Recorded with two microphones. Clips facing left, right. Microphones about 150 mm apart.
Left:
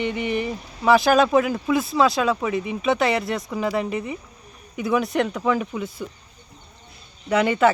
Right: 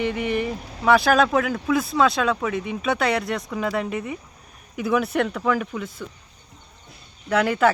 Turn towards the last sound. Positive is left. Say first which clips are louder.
# left 1 dB
turn(degrees=0)  # may be behind; listen again after turning